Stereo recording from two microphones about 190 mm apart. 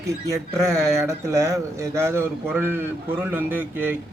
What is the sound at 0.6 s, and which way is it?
A man's voice, 15° right (ahead or behind).